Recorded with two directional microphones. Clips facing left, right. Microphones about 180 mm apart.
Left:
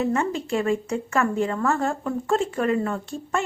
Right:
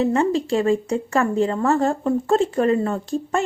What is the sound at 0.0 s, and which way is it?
A woman's voice, 30° right (ahead or behind).